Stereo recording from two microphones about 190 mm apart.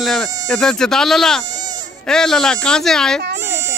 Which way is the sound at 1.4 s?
20° right (ahead or behind).